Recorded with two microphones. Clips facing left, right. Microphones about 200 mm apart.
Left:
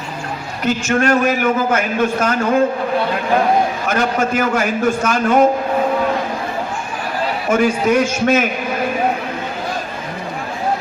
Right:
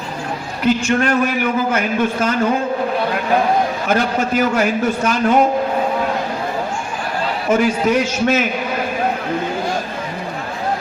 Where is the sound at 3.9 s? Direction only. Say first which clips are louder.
Right 1 dB; 50° left (ahead or behind).